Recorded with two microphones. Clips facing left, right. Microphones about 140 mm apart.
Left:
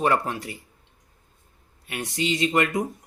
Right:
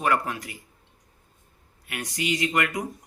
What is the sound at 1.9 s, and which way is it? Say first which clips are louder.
Speech: left 2 dB; 25° left (ahead or behind).